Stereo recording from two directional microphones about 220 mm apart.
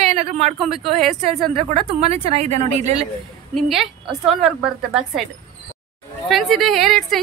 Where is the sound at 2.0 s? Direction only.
30° right (ahead or behind).